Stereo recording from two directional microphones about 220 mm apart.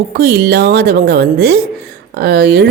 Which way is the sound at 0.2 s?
45° right (ahead or behind).